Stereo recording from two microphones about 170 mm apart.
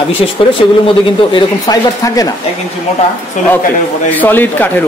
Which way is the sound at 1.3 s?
20° left (ahead or behind).